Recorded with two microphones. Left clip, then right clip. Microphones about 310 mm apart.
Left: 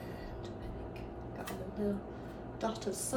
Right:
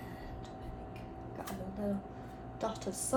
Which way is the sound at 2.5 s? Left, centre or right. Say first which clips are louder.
Left 1 dB; right.